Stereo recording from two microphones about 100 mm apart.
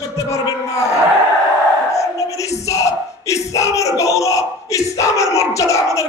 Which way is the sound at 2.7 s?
30° left (ahead or behind).